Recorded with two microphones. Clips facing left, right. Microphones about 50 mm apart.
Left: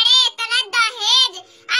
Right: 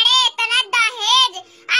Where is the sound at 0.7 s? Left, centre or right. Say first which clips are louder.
Right 1 dB; right.